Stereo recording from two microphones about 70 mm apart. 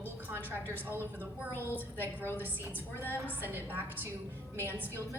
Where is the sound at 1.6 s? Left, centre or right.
Left.